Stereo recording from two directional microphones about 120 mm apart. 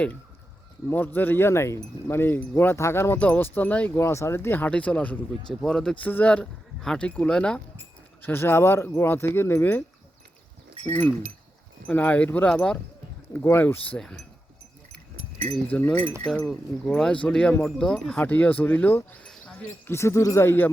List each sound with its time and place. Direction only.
0.9 s speech: 15° left (ahead or behind)
8.2 s speech: 20° left (ahead or behind)
10.8 s speech: 15° left (ahead or behind)
14.0 s speech: 5° left (ahead or behind)
15.7 s speech: 15° left (ahead or behind)
19.9 s speech: 25° left (ahead or behind)